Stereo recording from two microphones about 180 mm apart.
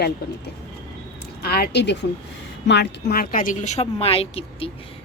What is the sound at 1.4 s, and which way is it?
Speech, 60° left (ahead or behind).